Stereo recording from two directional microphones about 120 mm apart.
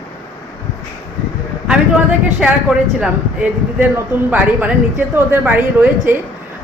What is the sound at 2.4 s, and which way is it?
Speech, 10° right (ahead or behind).